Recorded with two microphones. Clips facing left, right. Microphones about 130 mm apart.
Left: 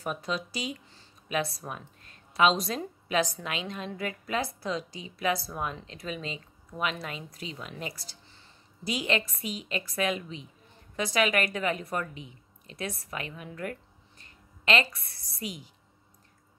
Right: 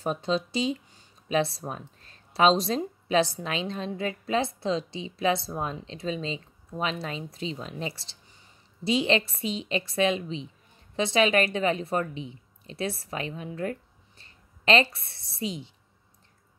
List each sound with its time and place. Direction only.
0.0 s a woman's voice: 25° right (ahead or behind)